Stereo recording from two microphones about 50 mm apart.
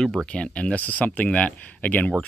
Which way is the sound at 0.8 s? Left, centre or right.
Left.